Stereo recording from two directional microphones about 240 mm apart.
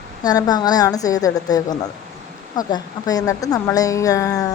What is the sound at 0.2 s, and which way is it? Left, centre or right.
A woman's voice, centre.